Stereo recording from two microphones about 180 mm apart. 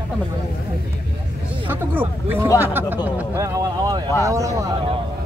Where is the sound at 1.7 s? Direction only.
10° right (ahead or behind).